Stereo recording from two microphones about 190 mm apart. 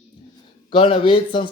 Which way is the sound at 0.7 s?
25° left (ahead or behind).